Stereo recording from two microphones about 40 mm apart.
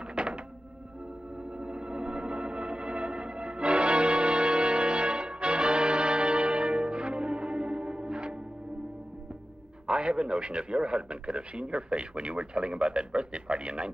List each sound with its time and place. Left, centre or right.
0.0 s thunk: right
1.4 s music: right
9.8 s a man's voice: right